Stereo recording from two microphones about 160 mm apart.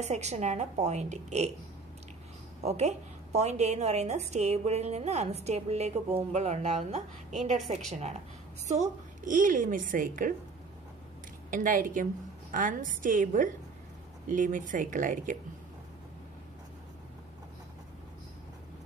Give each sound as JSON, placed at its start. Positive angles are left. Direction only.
{"t": 0.0, "sound": "a woman's voice", "side_deg": -45}
{"t": 2.6, "sound": "a woman's voice", "side_deg": -45}
{"t": 11.5, "sound": "a woman's voice", "side_deg": -55}